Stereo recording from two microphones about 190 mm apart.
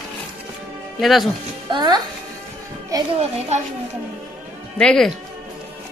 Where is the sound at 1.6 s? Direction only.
25° right (ahead or behind).